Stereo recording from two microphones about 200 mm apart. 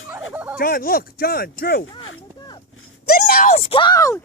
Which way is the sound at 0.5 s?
45° left (ahead or behind).